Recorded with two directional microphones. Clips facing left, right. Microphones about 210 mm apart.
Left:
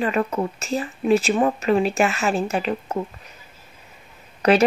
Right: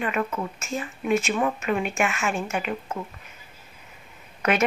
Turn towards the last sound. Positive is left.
turn(degrees=35)  # may be behind; listen again after turning